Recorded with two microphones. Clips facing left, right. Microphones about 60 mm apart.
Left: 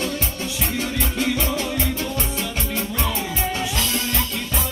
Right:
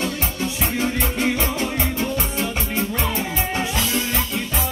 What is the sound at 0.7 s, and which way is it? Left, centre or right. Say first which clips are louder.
Music: right 2 dB; right.